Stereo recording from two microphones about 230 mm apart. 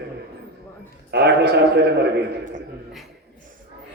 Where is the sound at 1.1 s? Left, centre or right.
Right.